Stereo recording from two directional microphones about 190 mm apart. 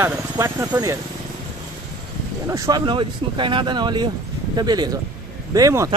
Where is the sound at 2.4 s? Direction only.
15° right (ahead or behind).